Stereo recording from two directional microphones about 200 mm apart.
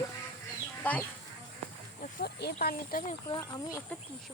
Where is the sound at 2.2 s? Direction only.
55° left (ahead or behind).